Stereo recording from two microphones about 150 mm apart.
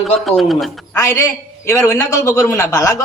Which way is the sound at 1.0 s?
20° left (ahead or behind).